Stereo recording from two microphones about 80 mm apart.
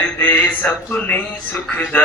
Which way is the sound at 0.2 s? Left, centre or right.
Left.